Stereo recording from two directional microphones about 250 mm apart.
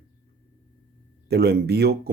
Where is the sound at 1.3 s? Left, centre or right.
Right.